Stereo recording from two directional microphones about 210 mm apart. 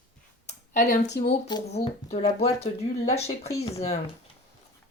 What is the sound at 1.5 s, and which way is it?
Speech, 20° left (ahead or behind).